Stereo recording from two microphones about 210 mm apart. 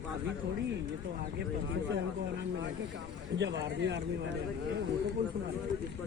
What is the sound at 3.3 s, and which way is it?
Speech, 55° right (ahead or behind).